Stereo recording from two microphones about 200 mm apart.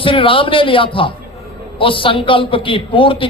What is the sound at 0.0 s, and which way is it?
A man's voice, 25° left (ahead or behind).